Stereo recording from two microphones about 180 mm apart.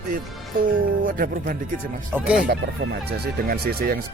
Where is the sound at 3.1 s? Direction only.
60° right (ahead or behind).